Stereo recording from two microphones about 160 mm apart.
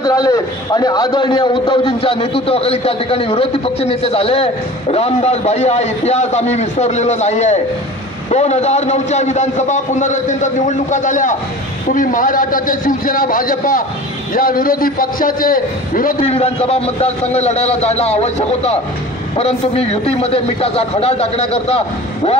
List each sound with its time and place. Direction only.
0.0 s a man's voice: 25° left (ahead or behind); by 16.2 s 60° left (ahead or behind)
16.2 s a man's voice: 40° left (ahead or behind)